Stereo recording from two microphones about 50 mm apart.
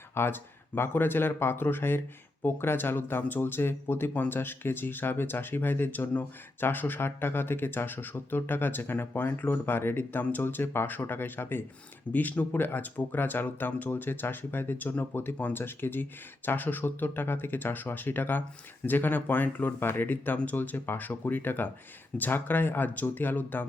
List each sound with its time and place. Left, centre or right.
0.1 s speech: left
12.1 s speech: left
12.5 s speech: left